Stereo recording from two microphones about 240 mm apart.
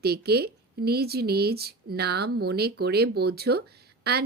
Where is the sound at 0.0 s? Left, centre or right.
Right.